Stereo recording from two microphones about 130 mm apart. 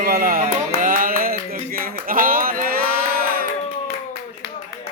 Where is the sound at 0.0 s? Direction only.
90° right.